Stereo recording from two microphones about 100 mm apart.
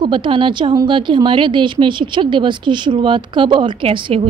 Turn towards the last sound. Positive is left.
turn(degrees=-60)  # may be behind; listen again after turning